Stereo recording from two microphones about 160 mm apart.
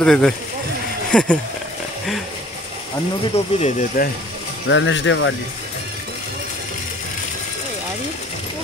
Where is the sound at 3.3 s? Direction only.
45° left (ahead or behind).